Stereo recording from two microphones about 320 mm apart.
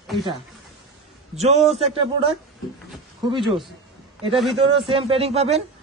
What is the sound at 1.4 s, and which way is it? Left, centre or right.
Speech, centre.